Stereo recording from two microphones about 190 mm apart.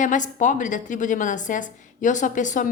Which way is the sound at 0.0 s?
40° left (ahead or behind).